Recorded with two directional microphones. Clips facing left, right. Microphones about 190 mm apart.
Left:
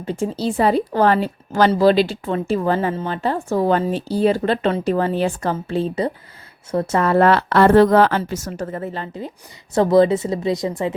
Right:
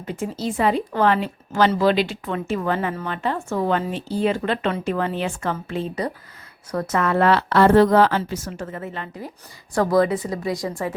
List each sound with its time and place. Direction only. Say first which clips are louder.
0.0 s speech: left 4 dB; 30° left (ahead or behind)
7.3 s a woman's voice: left 2 dB; 55° left (ahead or behind); by 10.9 s 20° left (ahead or behind)